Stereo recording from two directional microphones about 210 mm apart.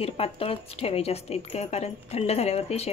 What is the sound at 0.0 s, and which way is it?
A woman's voice, 25° left (ahead or behind).